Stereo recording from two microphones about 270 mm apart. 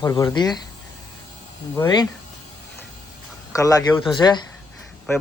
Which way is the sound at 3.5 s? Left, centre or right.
Centre.